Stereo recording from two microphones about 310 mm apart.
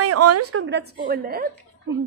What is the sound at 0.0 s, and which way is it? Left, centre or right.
A woman's voice, right.